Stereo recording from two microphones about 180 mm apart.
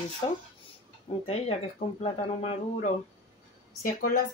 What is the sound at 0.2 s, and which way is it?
Speech, 25° left (ahead or behind).